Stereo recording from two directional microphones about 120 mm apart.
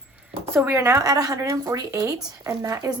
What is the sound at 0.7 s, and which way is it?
Speech, 25° right (ahead or behind).